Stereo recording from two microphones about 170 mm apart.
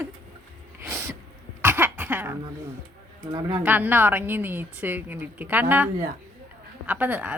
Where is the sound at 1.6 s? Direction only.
10° right (ahead or behind).